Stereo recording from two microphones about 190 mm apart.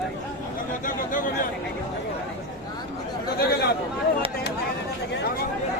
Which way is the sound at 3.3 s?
55° left (ahead or behind).